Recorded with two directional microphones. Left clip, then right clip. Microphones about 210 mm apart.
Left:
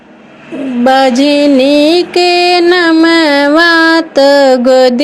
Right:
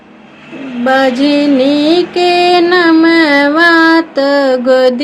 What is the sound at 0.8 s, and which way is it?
Music, 35° left (ahead or behind).